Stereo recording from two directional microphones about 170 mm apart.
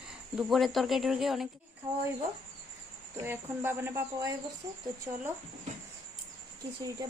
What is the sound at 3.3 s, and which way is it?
Speech, 15° right (ahead or behind).